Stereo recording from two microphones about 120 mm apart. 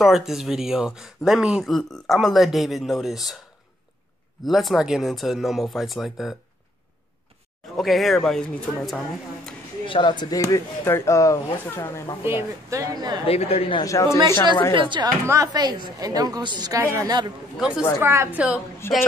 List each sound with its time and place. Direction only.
0.0 s speech: 5° right (ahead or behind)
4.5 s speech: centre (ahead or behind)
7.7 s speech: centre (ahead or behind)
9.8 s speech: 40° left (ahead or behind); by 12.2 s 25° left (ahead or behind)
12.2 s a woman's voice: 20° right (ahead or behind)
13.2 s speech: 55° left (ahead or behind)
13.8 s speech: 25° left (ahead or behind)
14.7 s speech: 45° right (ahead or behind)
15.2 s a woman's voice: 30° right (ahead or behind)
17.6 s speech: 5° right (ahead or behind)
18.0 s a woman's voice: 20° right (ahead or behind)
18.8 s speech: 20° left (ahead or behind)